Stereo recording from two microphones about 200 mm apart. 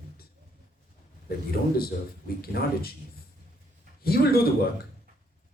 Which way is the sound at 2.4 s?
50° left (ahead or behind).